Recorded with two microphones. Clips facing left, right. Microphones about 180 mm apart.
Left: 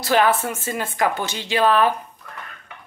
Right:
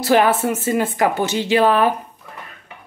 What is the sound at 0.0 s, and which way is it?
Speech, 10° right (ahead or behind).